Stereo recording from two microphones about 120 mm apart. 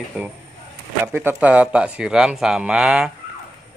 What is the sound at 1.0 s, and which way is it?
Speech, 20° right (ahead or behind).